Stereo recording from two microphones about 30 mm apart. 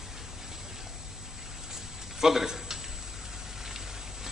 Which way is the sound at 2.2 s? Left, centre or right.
Centre.